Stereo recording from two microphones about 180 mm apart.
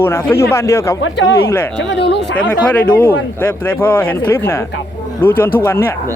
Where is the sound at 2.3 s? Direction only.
10° left (ahead or behind).